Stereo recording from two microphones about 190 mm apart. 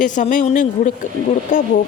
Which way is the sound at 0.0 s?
40° left (ahead or behind).